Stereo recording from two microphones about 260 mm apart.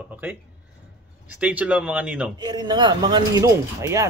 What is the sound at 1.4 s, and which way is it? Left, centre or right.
Speech, centre.